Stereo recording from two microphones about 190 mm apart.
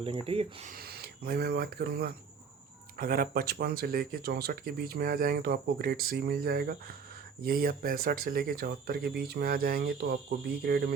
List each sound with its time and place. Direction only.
0.0 s speech: 30° right (ahead or behind)
0.7 s speech: 55° right (ahead or behind)